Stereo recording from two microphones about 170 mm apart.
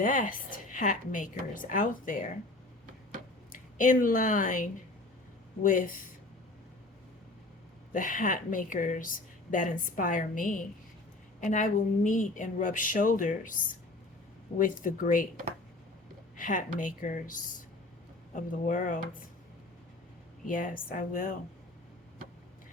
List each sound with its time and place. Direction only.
0.0 s a woman's voice: 50° left (ahead or behind)
3.5 s a woman's voice: 50° left (ahead or behind)
7.9 s a woman's voice: 50° left (ahead or behind)
16.4 s a woman's voice: 50° left (ahead or behind)
20.5 s a woman's voice: 50° left (ahead or behind)